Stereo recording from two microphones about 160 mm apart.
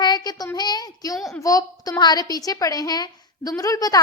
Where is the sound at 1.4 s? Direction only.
20° left (ahead or behind).